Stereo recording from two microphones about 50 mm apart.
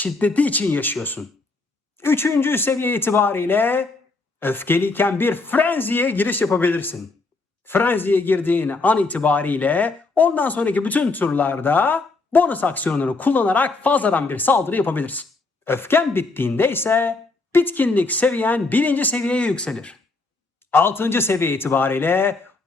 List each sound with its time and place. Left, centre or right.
0.0 s speech: left
2.0 s speech: left
15.6 s speech: left
20.7 s speech: left